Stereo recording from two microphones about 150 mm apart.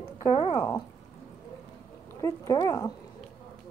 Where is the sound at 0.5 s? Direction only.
20° left (ahead or behind).